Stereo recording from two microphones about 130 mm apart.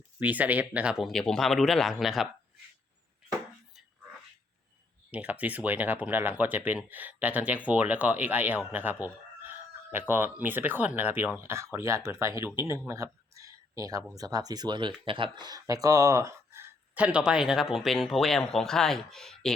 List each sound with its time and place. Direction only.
0.2 s speech: 10° right (ahead or behind)
5.1 s speech: 10° right (ahead or behind)
9.4 s chicken: 15° right (ahead or behind)
10.4 s speech: 15° right (ahead or behind); by 19.5 s 5° left (ahead or behind)